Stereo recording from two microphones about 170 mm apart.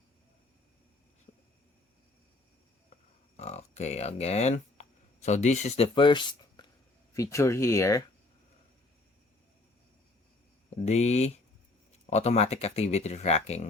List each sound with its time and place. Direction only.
3.3 s speech: 40° left (ahead or behind); by 8.0 s 15° left (ahead or behind)
10.8 s speech: 40° left (ahead or behind)